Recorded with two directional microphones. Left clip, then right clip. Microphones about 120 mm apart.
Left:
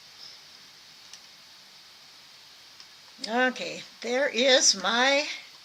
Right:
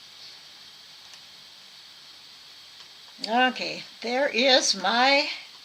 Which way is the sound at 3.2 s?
30° left (ahead or behind).